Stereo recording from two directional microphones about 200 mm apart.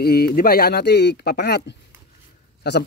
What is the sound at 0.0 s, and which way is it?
Speech, 50° left (ahead or behind).